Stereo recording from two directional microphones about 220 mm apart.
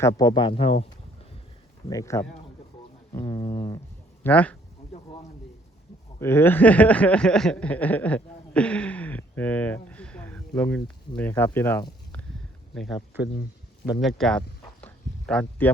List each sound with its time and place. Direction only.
0.2 s speech: 20° left (ahead or behind)
1.9 s a sound: 15° left (ahead or behind)
4.2 s speech: 5° left (ahead or behind)
6.1 s speech: 10° left (ahead or behind)
12.7 s speech: centre (ahead or behind)
13.9 s a sound: centre (ahead or behind)